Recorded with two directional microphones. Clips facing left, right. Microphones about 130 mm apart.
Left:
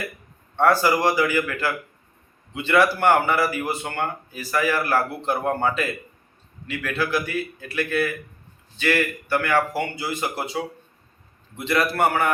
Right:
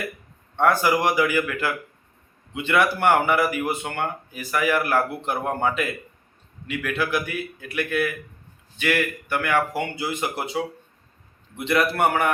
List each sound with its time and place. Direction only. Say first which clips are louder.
0.5 s a man's voice: left 1 dB; 20° right (ahead or behind)
9.3 s speech: left 1 dB; 15° right (ahead or behind)